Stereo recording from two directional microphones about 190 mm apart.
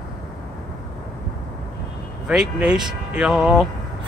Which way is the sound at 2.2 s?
5° right (ahead or behind).